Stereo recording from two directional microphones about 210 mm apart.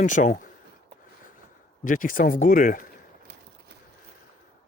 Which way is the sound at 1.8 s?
40° left (ahead or behind).